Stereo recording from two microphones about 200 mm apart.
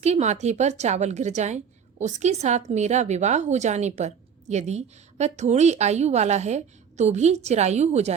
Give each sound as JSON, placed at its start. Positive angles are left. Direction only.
{"t": 0.0, "sound": "a woman's voice", "side_deg": -35}